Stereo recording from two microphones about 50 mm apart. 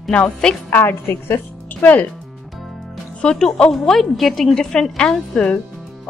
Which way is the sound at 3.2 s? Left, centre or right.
Centre.